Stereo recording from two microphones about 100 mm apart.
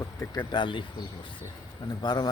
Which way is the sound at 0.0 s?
35° left (ahead or behind).